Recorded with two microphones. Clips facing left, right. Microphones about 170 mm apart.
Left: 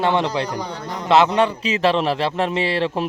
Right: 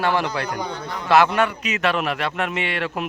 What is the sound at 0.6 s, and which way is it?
Speech, 35° left (ahead or behind).